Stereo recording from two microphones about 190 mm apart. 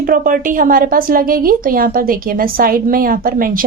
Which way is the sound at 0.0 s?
45° right (ahead or behind).